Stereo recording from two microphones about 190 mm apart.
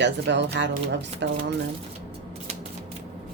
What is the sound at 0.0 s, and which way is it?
Speech, 65° right (ahead or behind).